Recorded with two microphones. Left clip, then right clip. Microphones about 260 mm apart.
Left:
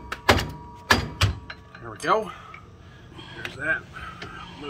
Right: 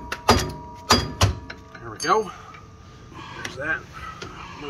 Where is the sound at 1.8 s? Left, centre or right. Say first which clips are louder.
Right 2 dB; centre.